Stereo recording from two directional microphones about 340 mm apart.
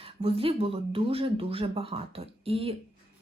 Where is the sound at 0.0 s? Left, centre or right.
Centre.